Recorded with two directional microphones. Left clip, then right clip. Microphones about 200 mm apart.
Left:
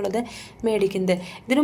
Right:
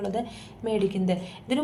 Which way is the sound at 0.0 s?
30° left (ahead or behind).